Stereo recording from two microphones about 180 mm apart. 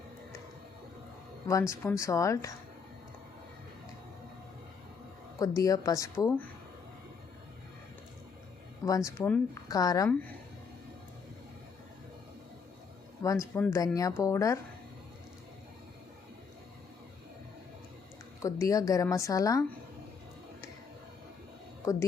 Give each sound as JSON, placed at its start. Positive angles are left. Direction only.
{"t": 1.5, "sound": "speech", "side_deg": 15}
{"t": 5.4, "sound": "speech", "side_deg": 20}
{"t": 8.8, "sound": "speech", "side_deg": 20}
{"t": 13.2, "sound": "speech", "side_deg": 15}
{"t": 18.4, "sound": "speech", "side_deg": 20}